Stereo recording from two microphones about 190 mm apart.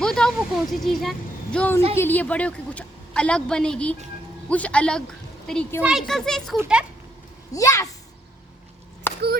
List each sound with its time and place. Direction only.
0.0 s a woman's voice: 5° left (ahead or behind)
7.5 s a child's voice: 15° left (ahead or behind)